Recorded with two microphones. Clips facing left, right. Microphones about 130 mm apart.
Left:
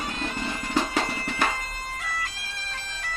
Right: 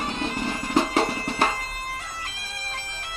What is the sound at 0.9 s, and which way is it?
Music, 30° right (ahead or behind).